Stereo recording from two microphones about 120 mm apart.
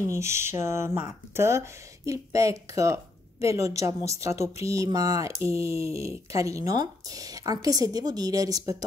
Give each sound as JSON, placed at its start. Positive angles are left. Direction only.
{"t": 0.0, "sound": "speech", "side_deg": -25}